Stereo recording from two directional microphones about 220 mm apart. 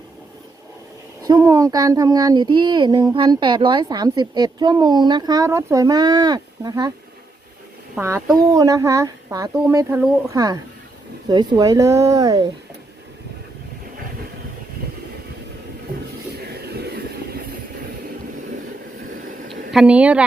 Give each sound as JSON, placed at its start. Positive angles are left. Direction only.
{"t": 1.3, "sound": "a woman's voice", "side_deg": -15}
{"t": 7.9, "sound": "speech", "side_deg": -10}
{"t": 16.4, "sound": "vehicle", "side_deg": -45}
{"t": 19.7, "sound": "speech", "side_deg": -5}